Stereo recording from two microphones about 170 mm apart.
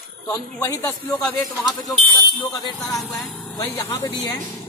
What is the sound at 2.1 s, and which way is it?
A man's voice, 20° left (ahead or behind).